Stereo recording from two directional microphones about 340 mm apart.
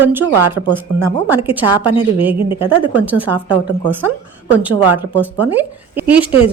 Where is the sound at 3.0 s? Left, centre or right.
Centre.